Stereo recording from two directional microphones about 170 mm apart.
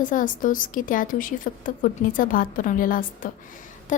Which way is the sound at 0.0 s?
50° left (ahead or behind).